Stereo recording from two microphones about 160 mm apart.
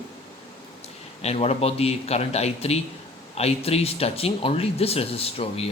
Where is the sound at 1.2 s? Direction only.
40° left (ahead or behind).